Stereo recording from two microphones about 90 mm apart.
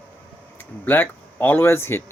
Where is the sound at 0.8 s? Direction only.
20° left (ahead or behind).